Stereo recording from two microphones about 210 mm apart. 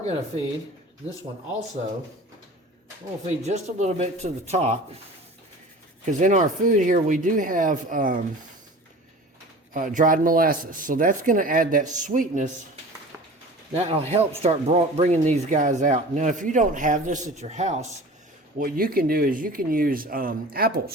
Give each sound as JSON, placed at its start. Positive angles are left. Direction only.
{"t": 3.2, "sound": "speech", "side_deg": -30}
{"t": 6.1, "sound": "speech", "side_deg": -35}
{"t": 9.7, "sound": "speech", "side_deg": -40}
{"t": 13.7, "sound": "speech", "side_deg": -30}